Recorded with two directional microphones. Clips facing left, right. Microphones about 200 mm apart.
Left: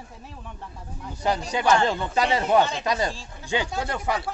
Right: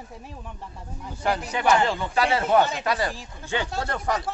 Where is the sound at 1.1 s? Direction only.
15° left (ahead or behind).